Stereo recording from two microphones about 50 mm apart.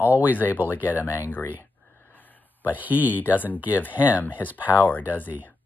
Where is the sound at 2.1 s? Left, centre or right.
Left.